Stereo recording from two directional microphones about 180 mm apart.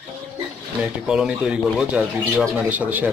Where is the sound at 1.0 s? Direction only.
5° right (ahead or behind).